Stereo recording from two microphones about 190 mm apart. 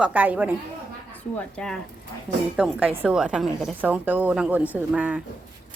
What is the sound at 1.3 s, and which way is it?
Speech, 5° left (ahead or behind).